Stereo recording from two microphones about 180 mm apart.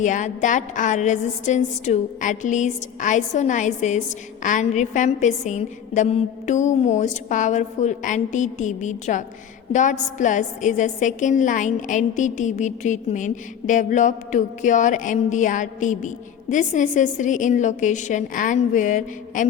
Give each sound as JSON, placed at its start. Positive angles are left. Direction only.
{"t": 0.0, "sound": "a woman's voice", "side_deg": 45}